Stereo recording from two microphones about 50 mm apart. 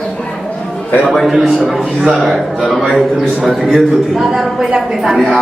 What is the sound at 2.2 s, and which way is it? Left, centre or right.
A man's voice, centre.